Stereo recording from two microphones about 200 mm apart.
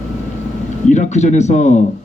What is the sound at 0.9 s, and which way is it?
Speech, 35° left (ahead or behind).